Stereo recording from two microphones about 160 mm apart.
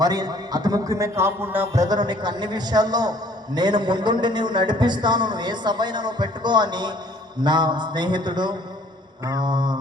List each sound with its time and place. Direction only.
0.0 s a man's voice: 25° right (ahead or behind)